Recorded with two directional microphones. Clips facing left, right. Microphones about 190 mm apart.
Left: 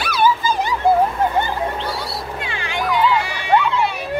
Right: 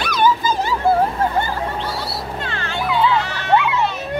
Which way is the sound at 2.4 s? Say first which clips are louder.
Left 1 dB; 10° left (ahead or behind).